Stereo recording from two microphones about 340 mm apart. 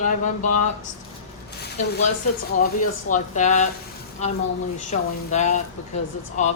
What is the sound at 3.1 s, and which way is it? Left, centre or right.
A man's voice, left.